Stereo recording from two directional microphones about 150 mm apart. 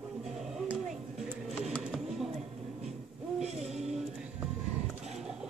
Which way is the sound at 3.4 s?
45° right (ahead or behind).